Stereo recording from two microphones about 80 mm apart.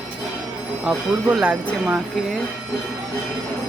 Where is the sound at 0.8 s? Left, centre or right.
Centre.